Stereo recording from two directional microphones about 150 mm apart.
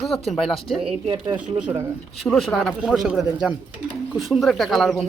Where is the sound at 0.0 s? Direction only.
Centre (ahead or behind).